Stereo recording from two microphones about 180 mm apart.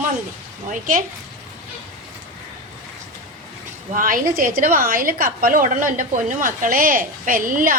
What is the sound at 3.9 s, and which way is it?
A woman's voice, 50° right (ahead or behind).